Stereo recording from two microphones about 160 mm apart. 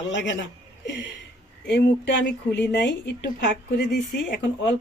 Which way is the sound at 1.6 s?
90° left.